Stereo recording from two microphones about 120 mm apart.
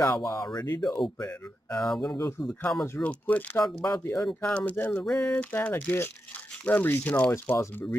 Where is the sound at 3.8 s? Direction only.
25° left (ahead or behind).